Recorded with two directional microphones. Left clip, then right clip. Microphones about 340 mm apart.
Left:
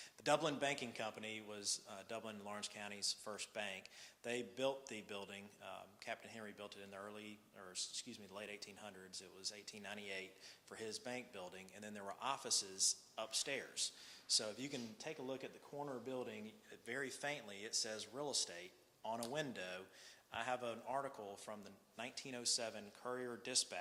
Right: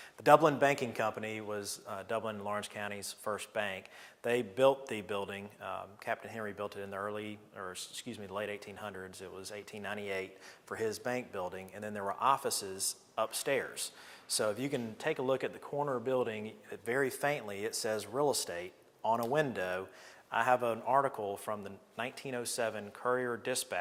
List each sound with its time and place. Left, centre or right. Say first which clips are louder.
0.3 s a man's voice: right 13 dB; right